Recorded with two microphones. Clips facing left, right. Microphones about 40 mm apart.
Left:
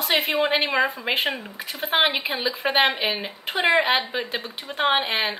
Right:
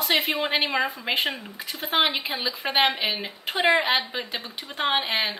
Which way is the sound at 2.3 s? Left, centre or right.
Centre.